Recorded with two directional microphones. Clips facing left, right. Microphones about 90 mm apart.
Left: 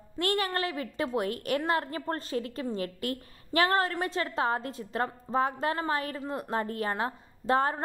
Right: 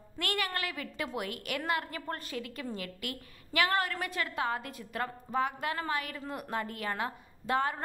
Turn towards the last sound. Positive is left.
turn(degrees=30)  # may be behind; listen again after turning